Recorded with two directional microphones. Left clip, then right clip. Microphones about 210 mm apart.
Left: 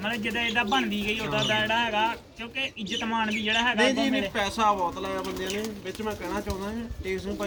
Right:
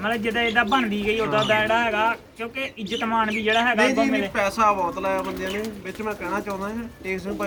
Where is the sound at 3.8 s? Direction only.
Centre (ahead or behind).